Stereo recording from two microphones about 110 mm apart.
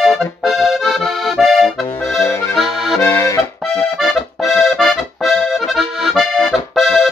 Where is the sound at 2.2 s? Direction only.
25° left (ahead or behind).